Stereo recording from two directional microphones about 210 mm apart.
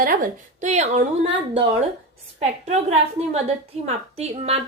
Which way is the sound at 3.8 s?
30° right (ahead or behind).